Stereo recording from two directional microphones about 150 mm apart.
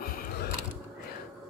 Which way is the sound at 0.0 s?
80° left.